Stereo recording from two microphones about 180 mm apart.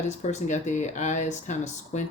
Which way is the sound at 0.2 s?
40° left (ahead or behind).